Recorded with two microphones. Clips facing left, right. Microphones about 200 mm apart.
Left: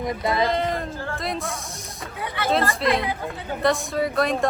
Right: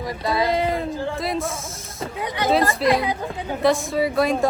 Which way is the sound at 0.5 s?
5° right (ahead or behind).